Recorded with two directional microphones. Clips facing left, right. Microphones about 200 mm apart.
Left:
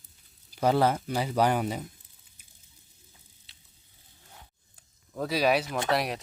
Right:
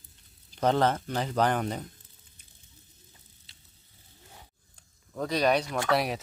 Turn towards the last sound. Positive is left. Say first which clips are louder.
# right 1 dB
turn(degrees=0)  # may be behind; listen again after turning